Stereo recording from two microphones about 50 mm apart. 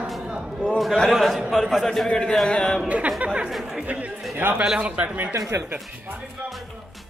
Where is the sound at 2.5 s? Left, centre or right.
Centre.